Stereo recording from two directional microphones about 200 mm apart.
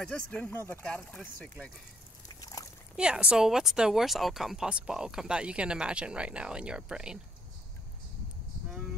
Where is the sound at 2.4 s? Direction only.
20° left (ahead or behind).